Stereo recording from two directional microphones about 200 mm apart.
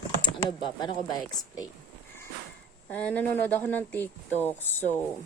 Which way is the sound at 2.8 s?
5° left (ahead or behind).